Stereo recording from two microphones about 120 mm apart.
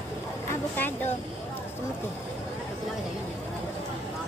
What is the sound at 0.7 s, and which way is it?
Speech, 15° left (ahead or behind).